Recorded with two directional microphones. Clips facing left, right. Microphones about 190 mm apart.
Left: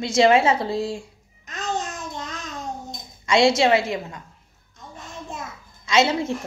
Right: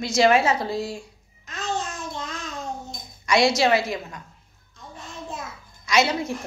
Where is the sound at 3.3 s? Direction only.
25° left (ahead or behind).